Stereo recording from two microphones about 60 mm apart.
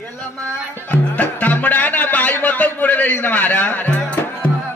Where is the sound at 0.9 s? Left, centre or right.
Left.